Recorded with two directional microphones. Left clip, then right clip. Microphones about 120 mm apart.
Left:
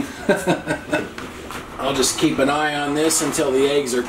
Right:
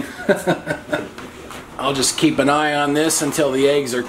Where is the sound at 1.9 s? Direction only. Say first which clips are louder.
Right 1 dB; 45° right (ahead or behind).